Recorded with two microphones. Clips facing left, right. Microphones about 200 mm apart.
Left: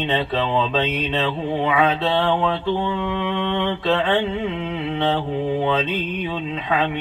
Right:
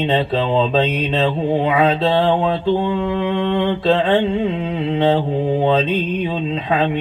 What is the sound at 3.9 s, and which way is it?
Mantra, 30° right (ahead or behind).